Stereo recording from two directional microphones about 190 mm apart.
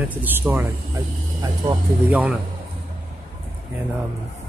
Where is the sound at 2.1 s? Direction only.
10° right (ahead or behind).